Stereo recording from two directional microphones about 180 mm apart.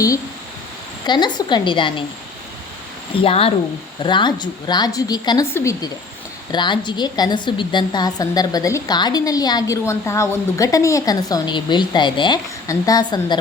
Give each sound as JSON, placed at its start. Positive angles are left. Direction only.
{"t": 1.0, "sound": "a woman's voice", "side_deg": 25}
{"t": 3.2, "sound": "a woman's voice", "side_deg": 30}